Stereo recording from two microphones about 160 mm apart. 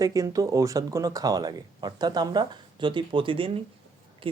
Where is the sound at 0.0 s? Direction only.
20° right (ahead or behind).